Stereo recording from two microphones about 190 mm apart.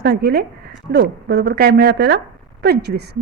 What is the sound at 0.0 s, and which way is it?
A woman's voice, 55° right (ahead or behind).